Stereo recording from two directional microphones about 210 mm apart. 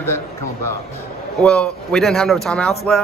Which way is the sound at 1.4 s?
5° left (ahead or behind).